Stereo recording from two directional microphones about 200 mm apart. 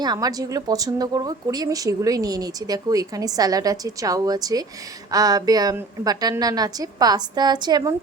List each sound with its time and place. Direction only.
0.0 s speech: 20° right (ahead or behind)